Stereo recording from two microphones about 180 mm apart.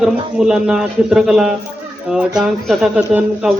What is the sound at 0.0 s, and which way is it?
Speech, 5° right (ahead or behind).